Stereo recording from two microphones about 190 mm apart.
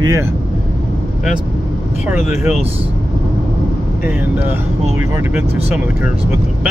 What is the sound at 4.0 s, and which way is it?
Speech, 10° right (ahead or behind).